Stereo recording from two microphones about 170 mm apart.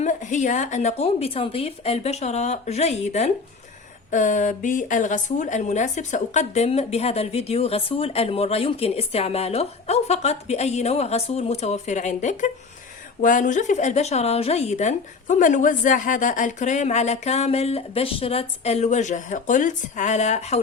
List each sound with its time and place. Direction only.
0.0 s a woman's voice: 45° left (ahead or behind)